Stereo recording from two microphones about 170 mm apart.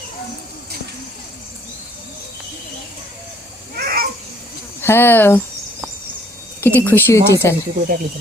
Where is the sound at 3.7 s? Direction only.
60° right (ahead or behind).